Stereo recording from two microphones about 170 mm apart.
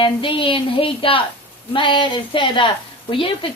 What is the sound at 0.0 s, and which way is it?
A woman's voice, 30° left (ahead or behind).